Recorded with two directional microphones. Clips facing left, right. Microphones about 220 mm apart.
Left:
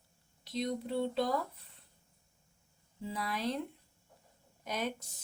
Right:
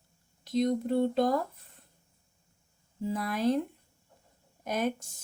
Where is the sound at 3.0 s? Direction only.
50° right (ahead or behind).